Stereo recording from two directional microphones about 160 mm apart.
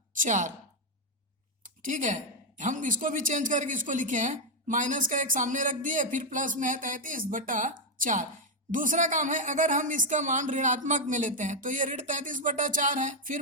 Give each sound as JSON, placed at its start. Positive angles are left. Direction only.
{"t": 0.1, "sound": "a woman's voice", "side_deg": -55}
{"t": 1.6, "sound": "a sound", "side_deg": -55}
{"t": 2.6, "sound": "speech", "side_deg": -50}